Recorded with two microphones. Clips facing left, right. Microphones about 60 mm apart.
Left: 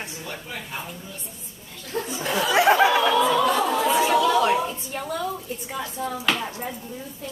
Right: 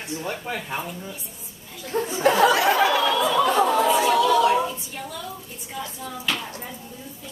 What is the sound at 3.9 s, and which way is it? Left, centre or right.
Chatter, left.